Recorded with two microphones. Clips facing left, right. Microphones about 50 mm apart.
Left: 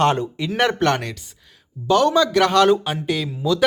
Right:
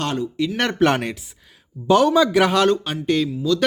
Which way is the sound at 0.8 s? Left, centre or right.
Centre.